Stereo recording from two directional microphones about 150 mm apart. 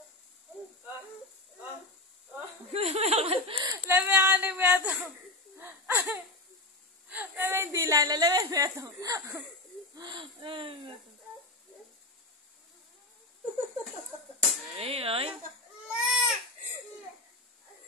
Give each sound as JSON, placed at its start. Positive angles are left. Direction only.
{"t": 2.7, "sound": "speech", "side_deg": -40}
{"t": 3.6, "sound": "speech", "side_deg": -15}
{"t": 5.6, "sound": "wheeze", "side_deg": -15}
{"t": 7.1, "sound": "a woman's voice", "side_deg": -15}
{"t": 14.8, "sound": "speech", "side_deg": -40}
{"t": 15.9, "sound": "crying", "side_deg": -5}